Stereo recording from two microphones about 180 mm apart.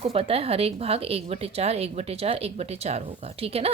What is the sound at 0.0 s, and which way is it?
Speech, 30° right (ahead or behind).